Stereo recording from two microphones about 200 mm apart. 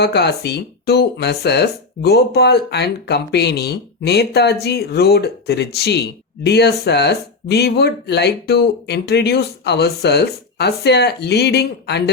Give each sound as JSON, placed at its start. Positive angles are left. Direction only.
{"t": 0.0, "sound": "speech", "side_deg": 55}